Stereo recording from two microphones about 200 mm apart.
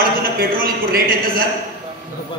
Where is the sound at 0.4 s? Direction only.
45° right (ahead or behind).